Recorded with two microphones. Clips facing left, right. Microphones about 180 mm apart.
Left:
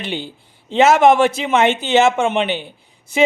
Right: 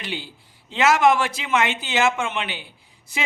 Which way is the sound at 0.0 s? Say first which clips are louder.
Left 6 dB; 25° left (ahead or behind).